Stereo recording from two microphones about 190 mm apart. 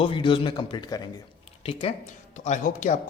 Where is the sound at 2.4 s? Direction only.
40° left (ahead or behind).